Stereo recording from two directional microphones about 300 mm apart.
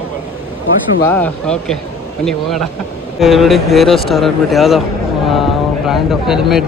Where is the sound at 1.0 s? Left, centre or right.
Centre.